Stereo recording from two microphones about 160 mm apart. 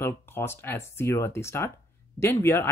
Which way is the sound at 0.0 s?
15° left (ahead or behind).